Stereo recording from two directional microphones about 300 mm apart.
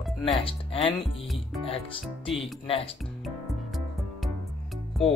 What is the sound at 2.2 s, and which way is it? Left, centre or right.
Speech, centre.